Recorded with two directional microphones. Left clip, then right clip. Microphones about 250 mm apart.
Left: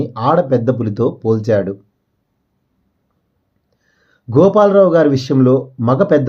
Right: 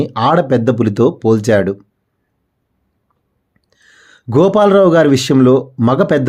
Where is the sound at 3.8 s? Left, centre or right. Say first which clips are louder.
Right 11 dB; right.